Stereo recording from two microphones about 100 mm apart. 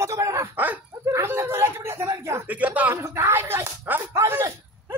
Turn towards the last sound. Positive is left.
turn(degrees=-30)  # may be behind; listen again after turning